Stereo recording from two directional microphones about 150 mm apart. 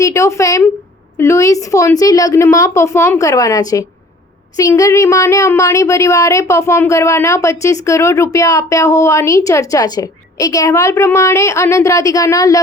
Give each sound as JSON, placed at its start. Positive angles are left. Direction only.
{"t": 0.0, "sound": "speech", "side_deg": 20}